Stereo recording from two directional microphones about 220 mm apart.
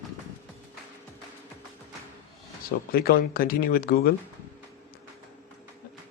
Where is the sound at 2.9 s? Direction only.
40° left (ahead or behind).